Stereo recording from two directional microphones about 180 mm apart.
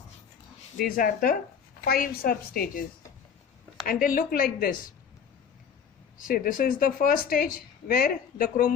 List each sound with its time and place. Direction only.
0.9 s a woman's voice: 55° left (ahead or behind)
3.8 s speech: 50° left (ahead or behind)
6.1 s speech: 50° left (ahead or behind)